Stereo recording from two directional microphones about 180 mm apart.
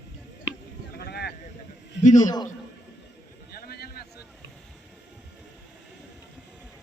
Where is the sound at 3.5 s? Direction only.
60° left (ahead or behind).